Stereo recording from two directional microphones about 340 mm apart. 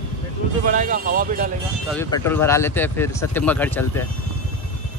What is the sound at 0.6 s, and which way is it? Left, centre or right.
Speech, right.